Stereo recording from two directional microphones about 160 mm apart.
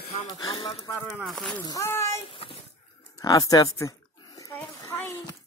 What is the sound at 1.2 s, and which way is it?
Speech, 5° left (ahead or behind).